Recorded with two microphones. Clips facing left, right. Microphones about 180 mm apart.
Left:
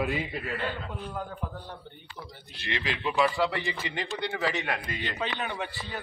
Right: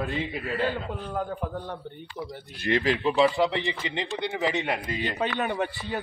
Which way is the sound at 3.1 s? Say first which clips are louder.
Right 1 dB; 20° right (ahead or behind).